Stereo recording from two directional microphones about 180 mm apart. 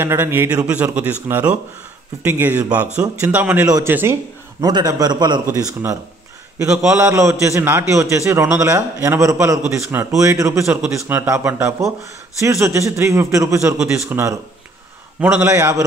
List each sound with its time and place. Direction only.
0.0 s a man's voice: 10° right (ahead or behind)
3.6 s a man's voice: 20° right (ahead or behind)
7.0 s a man's voice: 15° right (ahead or behind)